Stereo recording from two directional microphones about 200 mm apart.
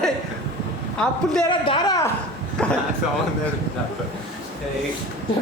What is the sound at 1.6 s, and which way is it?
Speech, 25° left (ahead or behind).